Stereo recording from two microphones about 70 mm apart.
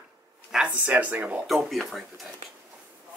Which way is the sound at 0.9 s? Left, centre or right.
Right.